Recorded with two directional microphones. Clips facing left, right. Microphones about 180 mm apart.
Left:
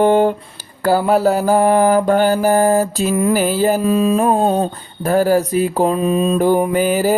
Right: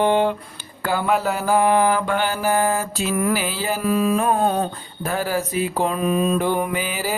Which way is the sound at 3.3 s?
45° left (ahead or behind).